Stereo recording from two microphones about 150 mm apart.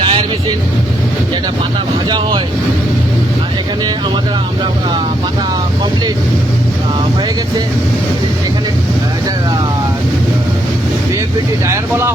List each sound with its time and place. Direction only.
0.0 s vehicle: 35° right (ahead or behind)
2.0 s speech: 30° right (ahead or behind)
11.7 s speech: 15° right (ahead or behind)